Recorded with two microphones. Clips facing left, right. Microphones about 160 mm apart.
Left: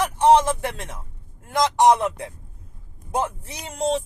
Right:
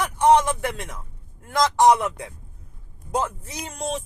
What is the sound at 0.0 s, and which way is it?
Speech, 30° left (ahead or behind).